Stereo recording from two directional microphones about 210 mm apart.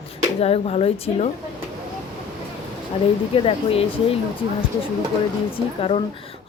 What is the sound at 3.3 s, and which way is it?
Speech, 25° left (ahead or behind).